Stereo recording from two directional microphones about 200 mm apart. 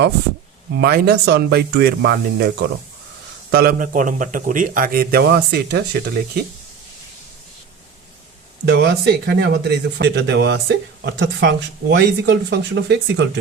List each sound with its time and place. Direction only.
0.8 s a man's voice: 55° right (ahead or behind)
8.6 s speech: 55° right (ahead or behind)